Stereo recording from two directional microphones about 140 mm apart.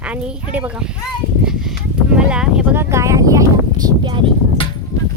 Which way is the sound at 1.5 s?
5° right (ahead or behind).